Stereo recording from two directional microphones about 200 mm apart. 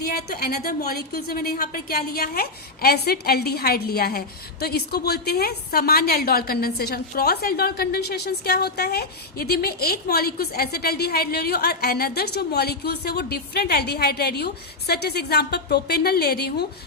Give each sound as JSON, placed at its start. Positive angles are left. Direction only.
{"t": 0.0, "sound": "a woman's voice", "side_deg": 50}